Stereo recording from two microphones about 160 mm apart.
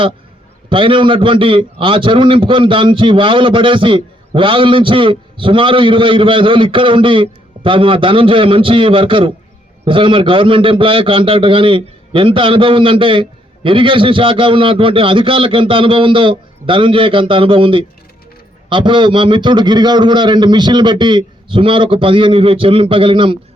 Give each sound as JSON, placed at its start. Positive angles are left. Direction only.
{"t": 0.7, "sound": "a man's voice", "side_deg": -30}